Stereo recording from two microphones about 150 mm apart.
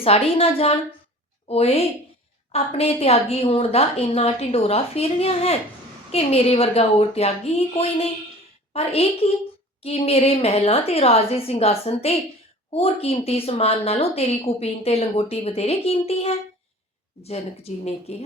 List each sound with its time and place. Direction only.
0.0 s a woman's voice: 40° left (ahead or behind)